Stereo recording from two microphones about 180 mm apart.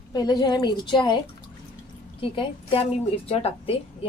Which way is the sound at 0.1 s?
20° left (ahead or behind).